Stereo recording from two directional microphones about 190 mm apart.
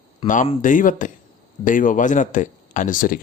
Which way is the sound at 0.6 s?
45° left (ahead or behind).